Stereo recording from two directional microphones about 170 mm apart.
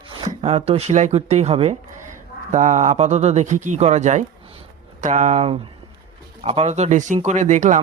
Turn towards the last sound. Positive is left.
turn(degrees=-45)  # may be behind; listen again after turning